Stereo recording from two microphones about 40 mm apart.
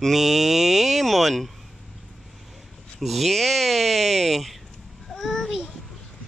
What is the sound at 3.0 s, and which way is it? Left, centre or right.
Speech, centre.